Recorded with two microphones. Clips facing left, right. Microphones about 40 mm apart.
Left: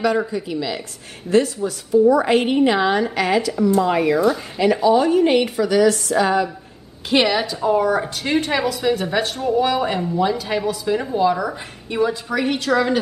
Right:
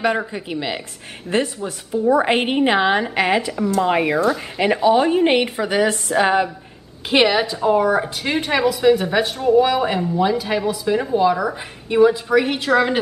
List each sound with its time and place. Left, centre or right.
0.3 s a woman's voice: right
7.1 s speech: centre